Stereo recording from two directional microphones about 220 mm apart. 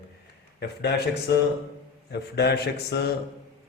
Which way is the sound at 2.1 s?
45° left (ahead or behind).